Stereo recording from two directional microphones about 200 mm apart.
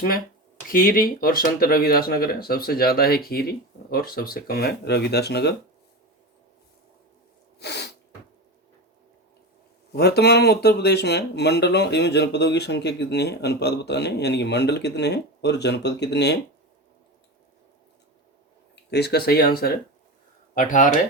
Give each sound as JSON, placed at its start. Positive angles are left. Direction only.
{"t": 0.7, "sound": "speech", "side_deg": 45}
{"t": 7.6, "sound": "sneeze", "side_deg": 55}
{"t": 9.9, "sound": "speech", "side_deg": 55}
{"t": 18.9, "sound": "speech", "side_deg": 55}